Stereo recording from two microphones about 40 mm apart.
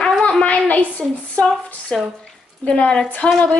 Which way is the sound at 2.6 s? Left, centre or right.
Left.